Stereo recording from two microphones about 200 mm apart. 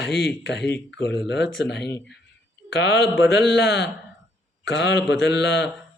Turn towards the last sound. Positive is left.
turn(degrees=60)  # may be behind; listen again after turning